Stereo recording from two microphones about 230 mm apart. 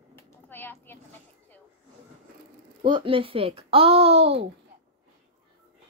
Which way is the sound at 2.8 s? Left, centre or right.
Right.